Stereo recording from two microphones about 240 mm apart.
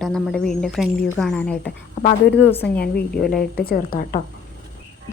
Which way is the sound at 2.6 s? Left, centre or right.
Left.